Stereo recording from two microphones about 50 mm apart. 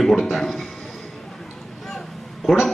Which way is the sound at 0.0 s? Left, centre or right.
Centre.